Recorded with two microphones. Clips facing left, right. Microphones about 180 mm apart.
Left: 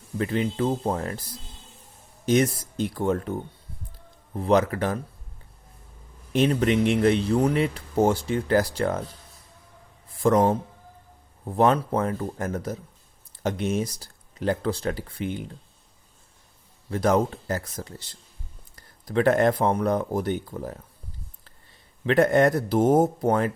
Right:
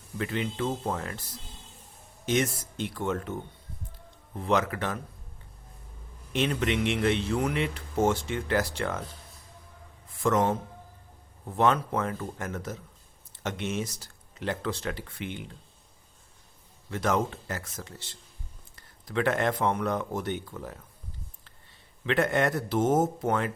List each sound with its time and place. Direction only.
0.2 s speech: 40° left (ahead or behind)
2.2 s speech: 40° left (ahead or behind)
6.3 s speech: 40° left (ahead or behind)
10.1 s a man's voice: 35° left (ahead or behind)
16.9 s speech: 35° left (ahead or behind)
22.0 s speech: 40° left (ahead or behind)